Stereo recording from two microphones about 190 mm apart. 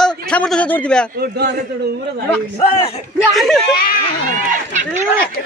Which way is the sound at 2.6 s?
35° left (ahead or behind).